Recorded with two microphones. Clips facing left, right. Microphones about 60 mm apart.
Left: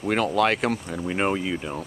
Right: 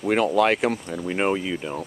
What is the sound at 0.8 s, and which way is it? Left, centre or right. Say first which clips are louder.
Speech: even; centre.